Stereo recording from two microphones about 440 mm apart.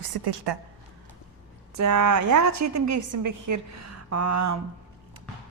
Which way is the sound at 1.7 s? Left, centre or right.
Right.